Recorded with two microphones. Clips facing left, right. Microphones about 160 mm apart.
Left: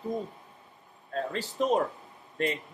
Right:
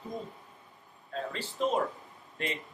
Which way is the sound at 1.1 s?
45° left (ahead or behind).